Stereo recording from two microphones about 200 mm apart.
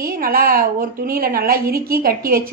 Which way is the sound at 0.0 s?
45° right (ahead or behind).